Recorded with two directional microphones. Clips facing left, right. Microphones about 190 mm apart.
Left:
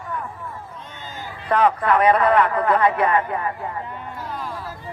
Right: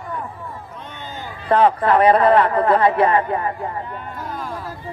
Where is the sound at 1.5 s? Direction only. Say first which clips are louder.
Right 3 dB; 30° right (ahead or behind).